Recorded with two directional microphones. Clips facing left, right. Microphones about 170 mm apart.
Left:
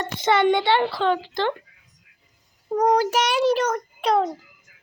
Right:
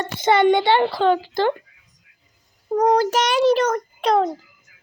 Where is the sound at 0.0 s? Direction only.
Centre (ahead or behind).